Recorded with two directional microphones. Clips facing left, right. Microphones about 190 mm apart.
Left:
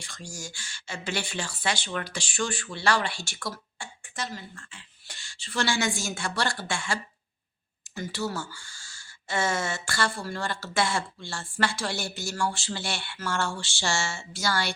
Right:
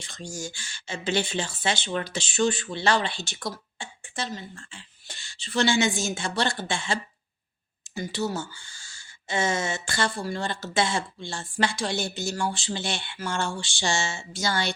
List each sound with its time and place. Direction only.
0.0 s speech: 20° right (ahead or behind)